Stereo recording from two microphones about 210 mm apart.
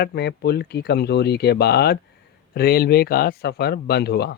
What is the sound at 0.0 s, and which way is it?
Speech, 50° left (ahead or behind).